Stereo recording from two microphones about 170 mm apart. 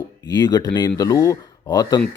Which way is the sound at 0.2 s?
20° left (ahead or behind).